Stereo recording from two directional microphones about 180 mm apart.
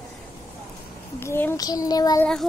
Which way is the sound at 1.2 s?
10° left (ahead or behind).